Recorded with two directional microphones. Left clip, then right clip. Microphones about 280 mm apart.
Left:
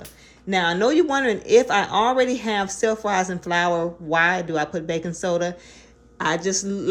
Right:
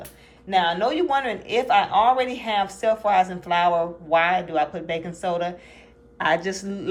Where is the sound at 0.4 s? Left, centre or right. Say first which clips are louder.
Left 1 dB; left.